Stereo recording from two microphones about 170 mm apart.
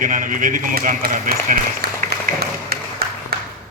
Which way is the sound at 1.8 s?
65° right (ahead or behind).